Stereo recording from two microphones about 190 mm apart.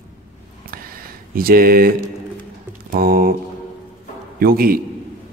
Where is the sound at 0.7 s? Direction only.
50° right (ahead or behind).